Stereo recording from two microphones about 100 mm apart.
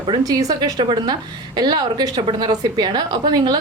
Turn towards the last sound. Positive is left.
turn(degrees=-45)  # may be behind; listen again after turning